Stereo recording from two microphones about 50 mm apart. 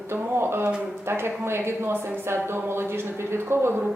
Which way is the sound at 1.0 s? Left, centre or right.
Right.